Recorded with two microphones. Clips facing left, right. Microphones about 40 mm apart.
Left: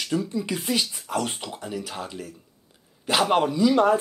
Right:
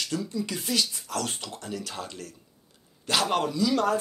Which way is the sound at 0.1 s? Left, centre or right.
Left.